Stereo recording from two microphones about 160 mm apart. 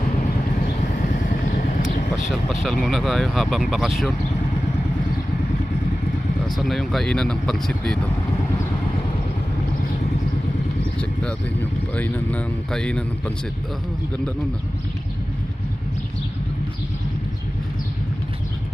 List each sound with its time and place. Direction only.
1.1 s vehicle: 55° left (ahead or behind)
2.1 s speech: centre (ahead or behind)
6.4 s speech: centre (ahead or behind)
11.2 s speech: 5° left (ahead or behind)